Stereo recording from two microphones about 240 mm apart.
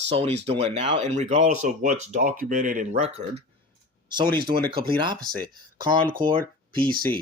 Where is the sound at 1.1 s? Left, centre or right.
Right.